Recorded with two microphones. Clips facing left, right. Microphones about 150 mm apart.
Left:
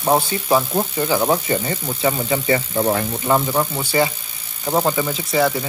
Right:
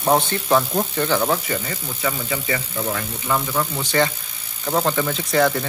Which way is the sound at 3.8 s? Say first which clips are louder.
Left 1 dB; 10° left (ahead or behind).